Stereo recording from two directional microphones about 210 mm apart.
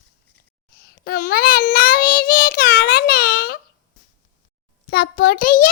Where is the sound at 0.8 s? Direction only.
45° left (ahead or behind).